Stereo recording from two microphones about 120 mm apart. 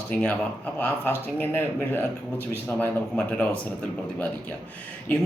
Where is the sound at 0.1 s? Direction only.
15° left (ahead or behind).